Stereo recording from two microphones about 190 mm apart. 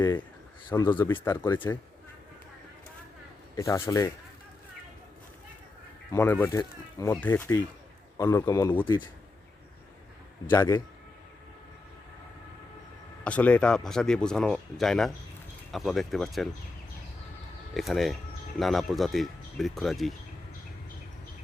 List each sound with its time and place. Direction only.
0.7 s speech: 20° left (ahead or behind)
3.5 s speech: 20° left (ahead or behind)
6.1 s speech: 10° left (ahead or behind)
10.5 s speech: 15° left (ahead or behind)
13.2 s speech: 5° left (ahead or behind)
17.7 s speech: centre (ahead or behind)